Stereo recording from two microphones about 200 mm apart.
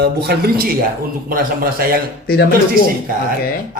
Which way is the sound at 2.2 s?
50° left (ahead or behind).